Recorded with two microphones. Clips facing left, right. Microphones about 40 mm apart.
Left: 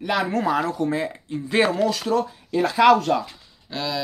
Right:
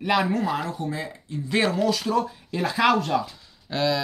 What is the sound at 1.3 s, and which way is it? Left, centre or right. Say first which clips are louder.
Speech: left 3 dB; centre.